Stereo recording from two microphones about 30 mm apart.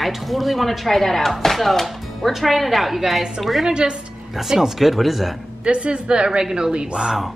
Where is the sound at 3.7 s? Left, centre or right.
Right.